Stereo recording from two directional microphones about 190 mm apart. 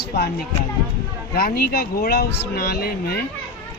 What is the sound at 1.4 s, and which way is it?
Speech, 55° left (ahead or behind).